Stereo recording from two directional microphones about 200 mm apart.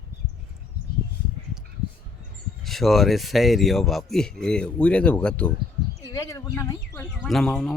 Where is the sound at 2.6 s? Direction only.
Centre (ahead or behind).